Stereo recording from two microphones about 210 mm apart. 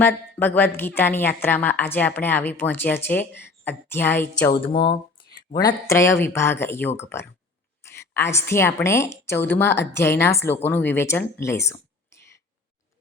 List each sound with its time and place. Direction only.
0.0 s a woman's voice: 10° left (ahead or behind)
4.6 s a woman's voice: 25° left (ahead or behind)